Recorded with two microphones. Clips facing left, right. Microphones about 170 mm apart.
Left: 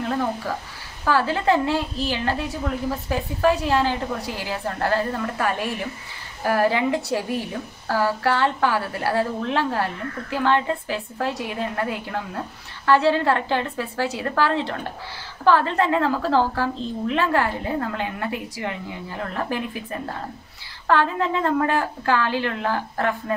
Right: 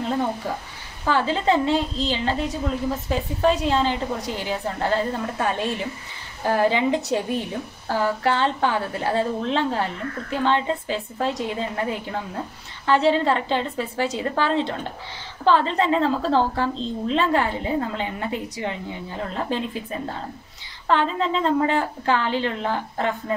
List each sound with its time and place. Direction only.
0.0 s a woman's voice: 20° right (ahead or behind)
20.9 s a woman's voice: 20° right (ahead or behind)